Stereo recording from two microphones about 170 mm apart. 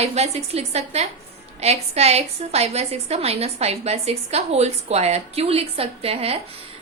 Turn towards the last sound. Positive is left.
turn(degrees=-35)  # may be behind; listen again after turning